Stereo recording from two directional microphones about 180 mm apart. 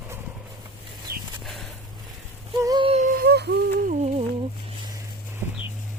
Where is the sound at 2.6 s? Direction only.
25° right (ahead or behind).